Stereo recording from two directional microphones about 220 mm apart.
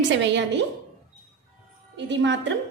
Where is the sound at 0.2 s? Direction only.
55° right (ahead or behind).